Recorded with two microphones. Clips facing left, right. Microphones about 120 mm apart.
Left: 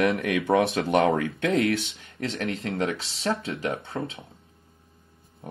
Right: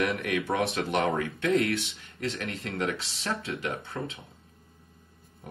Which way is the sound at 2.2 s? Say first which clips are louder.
Left 4 dB; 30° left (ahead or behind).